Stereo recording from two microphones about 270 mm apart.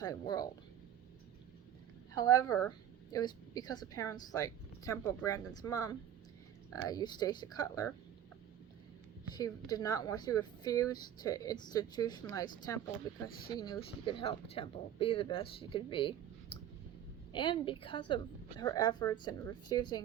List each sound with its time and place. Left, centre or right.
0.0 s a woman's voice: centre
2.1 s a woman's voice: centre
9.3 s a woman's voice: centre